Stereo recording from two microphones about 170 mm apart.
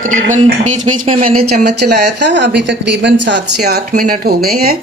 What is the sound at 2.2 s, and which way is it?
Speech, 90° right.